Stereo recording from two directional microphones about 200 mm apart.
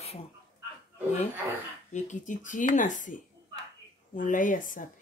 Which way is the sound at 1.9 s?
40° left (ahead or behind).